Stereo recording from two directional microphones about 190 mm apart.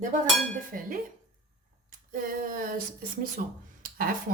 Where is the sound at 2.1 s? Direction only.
50° right (ahead or behind).